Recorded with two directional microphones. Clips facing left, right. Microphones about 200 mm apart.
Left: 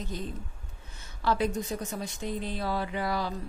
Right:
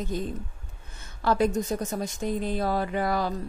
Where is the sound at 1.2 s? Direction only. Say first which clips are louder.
Right 4 dB; 45° right (ahead or behind).